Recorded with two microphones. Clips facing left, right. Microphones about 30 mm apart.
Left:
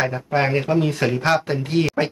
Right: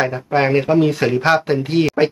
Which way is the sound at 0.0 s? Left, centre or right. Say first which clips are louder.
Right 3 dB; centre.